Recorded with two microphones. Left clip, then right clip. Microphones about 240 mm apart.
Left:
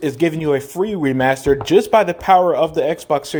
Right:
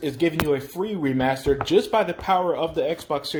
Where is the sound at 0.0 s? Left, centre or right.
Left.